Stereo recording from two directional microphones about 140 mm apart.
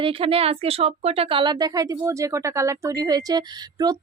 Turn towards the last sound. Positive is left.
turn(degrees=-30)  # may be behind; listen again after turning